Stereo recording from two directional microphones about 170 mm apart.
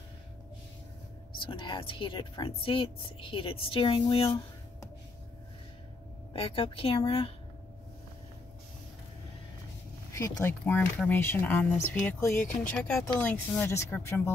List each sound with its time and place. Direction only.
1.4 s speech: 30° left (ahead or behind)
6.3 s speech: 35° left (ahead or behind)
10.1 s speech: 20° left (ahead or behind)
10.6 s speech: 10° left (ahead or behind)